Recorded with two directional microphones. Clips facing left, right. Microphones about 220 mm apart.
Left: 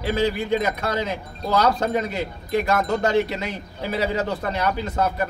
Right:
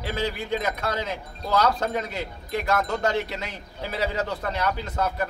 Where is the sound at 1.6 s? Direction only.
15° left (ahead or behind).